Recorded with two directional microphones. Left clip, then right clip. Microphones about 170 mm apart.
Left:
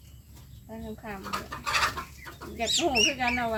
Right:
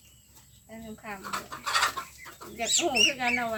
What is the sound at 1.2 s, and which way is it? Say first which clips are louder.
Bird: left 1 dB; 25° left (ahead or behind).